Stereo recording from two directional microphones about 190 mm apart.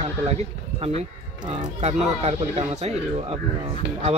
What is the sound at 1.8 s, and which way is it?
Speech, 35° right (ahead or behind).